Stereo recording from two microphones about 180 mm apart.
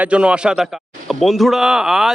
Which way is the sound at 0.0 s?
5° right (ahead or behind).